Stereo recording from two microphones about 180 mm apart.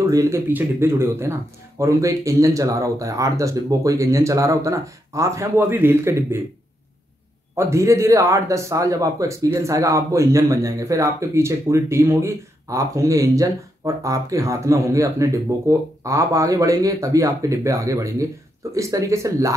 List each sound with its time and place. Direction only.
0.0 s speech: 15° right (ahead or behind)
7.5 s speech: 15° right (ahead or behind)